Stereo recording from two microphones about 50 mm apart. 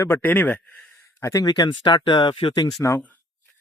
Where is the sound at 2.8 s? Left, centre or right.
Left.